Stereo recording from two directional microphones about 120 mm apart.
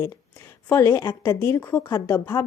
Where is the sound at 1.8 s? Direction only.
35° left (ahead or behind).